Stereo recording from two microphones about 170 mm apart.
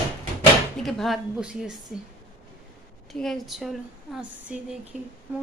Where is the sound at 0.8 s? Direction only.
Centre (ahead or behind).